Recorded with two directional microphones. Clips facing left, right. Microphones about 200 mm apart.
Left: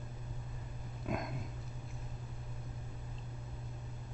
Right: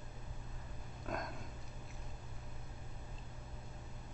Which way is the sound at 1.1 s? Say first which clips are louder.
Left 4 dB; 5° left (ahead or behind).